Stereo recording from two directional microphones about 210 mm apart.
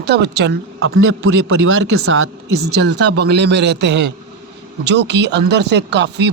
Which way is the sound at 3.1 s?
55° right (ahead or behind).